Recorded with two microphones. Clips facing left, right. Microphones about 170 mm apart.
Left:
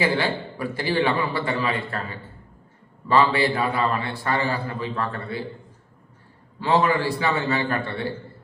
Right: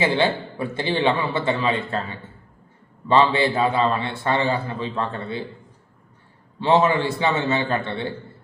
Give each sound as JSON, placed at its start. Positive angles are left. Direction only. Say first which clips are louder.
{"t": 0.0, "sound": "a man's voice", "louder": "right 3 dB", "side_deg": -25}
{"t": 3.1, "sound": "a man's voice", "louder": "right 2 dB", "side_deg": -25}
{"t": 6.6, "sound": "a man's voice", "louder": "right 2 dB", "side_deg": -25}